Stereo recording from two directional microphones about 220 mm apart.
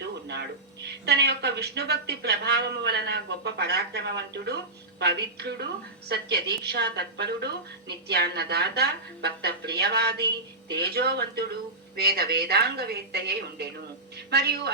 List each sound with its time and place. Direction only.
0.0 s speech: 50° right (ahead or behind)